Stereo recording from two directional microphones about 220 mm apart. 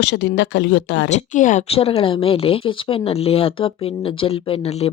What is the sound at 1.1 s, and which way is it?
Speech, 35° left (ahead or behind).